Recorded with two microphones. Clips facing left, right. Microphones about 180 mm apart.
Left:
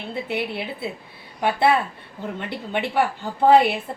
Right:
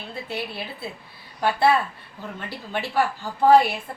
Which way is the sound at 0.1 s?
20° left (ahead or behind).